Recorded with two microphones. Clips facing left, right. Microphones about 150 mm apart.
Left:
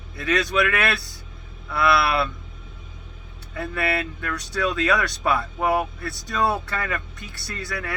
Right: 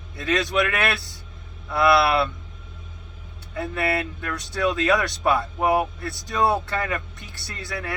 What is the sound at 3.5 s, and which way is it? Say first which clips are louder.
Speech: right 1 dB; 25° right (ahead or behind).